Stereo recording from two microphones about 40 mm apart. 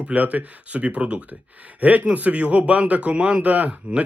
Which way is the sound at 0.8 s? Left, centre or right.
Right.